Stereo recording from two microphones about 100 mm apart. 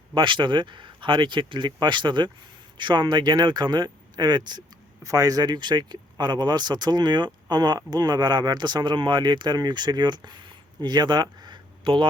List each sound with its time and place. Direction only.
0.1 s a man's voice: 55° right (ahead or behind)
5.0 s a man's voice: 35° right (ahead or behind); by 12.0 s 55° right (ahead or behind)